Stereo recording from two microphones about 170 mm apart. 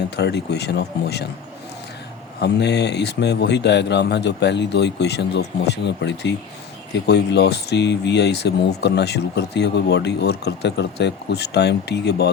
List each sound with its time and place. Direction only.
0.2 s speech: 80° left
2.4 s speech: 80° left
7.1 s speech: 75° left (ahead or behind)